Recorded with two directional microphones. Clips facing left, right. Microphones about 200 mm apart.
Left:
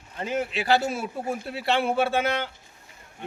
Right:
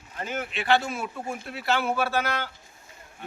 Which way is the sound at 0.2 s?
35° left (ahead or behind).